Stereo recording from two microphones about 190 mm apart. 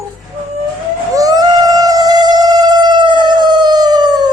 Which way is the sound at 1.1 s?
20° right (ahead or behind).